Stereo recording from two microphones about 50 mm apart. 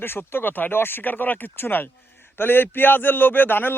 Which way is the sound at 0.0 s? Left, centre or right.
Left.